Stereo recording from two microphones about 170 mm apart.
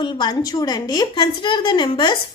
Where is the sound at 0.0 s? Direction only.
25° left (ahead or behind).